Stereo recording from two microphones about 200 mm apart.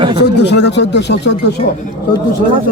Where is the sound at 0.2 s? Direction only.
55° left (ahead or behind).